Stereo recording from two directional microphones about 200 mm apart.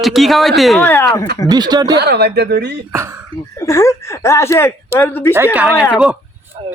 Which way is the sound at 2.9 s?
15° right (ahead or behind).